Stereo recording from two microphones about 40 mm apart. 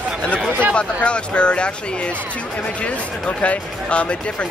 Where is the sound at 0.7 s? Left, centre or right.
Left.